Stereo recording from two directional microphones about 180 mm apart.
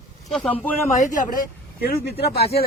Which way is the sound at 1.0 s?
45° left (ahead or behind).